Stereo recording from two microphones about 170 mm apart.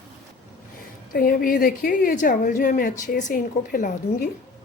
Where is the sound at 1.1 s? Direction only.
60° left (ahead or behind).